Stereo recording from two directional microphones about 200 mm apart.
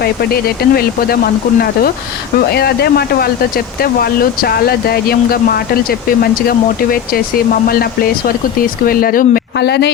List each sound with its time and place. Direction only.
0.0 s speech: 50° left (ahead or behind)
2.5 s speech: 50° left (ahead or behind)